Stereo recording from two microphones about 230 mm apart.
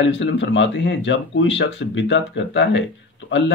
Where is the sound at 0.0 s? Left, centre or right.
Left.